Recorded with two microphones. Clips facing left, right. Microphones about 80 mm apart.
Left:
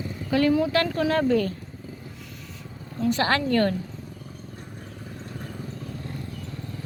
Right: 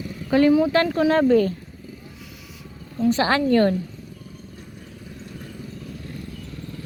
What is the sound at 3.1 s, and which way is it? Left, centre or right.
Speech, right.